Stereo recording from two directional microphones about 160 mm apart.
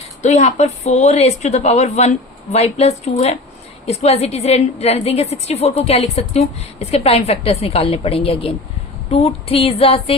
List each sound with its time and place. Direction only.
0.2 s a woman's voice: 45° left (ahead or behind)